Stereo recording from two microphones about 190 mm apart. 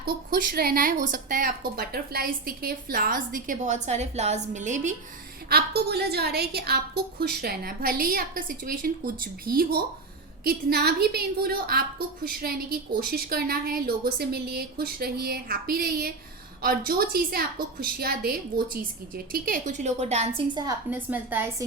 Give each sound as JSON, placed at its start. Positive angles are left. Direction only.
{"t": 0.0, "sound": "speech", "side_deg": -50}
{"t": 5.5, "sound": "a woman's voice", "side_deg": -55}
{"t": 20.9, "sound": "a woman's voice", "side_deg": -10}